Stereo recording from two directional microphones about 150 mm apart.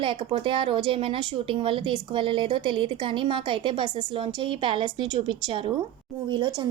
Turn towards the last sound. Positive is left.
turn(degrees=-30)  # may be behind; listen again after turning